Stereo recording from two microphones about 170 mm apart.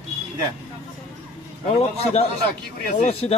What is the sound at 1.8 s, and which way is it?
A man's voice, 40° left (ahead or behind).